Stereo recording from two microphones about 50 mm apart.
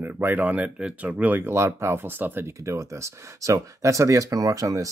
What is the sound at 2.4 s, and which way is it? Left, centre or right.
Speech, right.